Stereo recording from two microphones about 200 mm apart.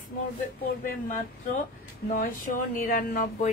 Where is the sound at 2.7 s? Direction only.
45° left (ahead or behind).